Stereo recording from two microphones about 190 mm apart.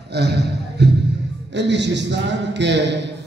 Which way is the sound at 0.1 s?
60° right (ahead or behind).